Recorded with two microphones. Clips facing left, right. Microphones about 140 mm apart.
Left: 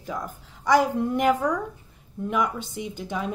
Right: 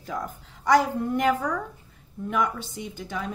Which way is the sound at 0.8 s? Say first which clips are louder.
Left 2 dB; 15° left (ahead or behind).